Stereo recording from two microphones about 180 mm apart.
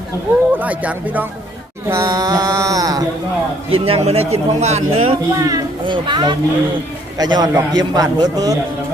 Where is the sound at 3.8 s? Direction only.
35° right (ahead or behind).